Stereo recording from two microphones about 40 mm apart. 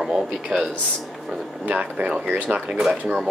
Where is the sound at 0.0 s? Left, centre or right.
Centre.